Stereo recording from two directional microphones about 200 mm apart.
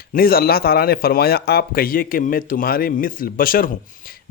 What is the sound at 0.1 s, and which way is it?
Speech, 45° left (ahead or behind).